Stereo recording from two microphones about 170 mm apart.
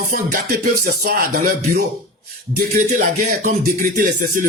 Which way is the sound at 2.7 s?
50° right (ahead or behind).